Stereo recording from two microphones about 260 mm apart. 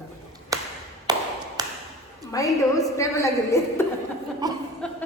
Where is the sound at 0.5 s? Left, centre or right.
Centre.